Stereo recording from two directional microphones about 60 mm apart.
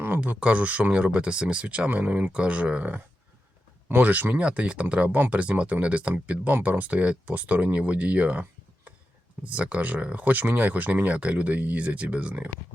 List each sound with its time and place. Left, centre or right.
0.2 s speech: right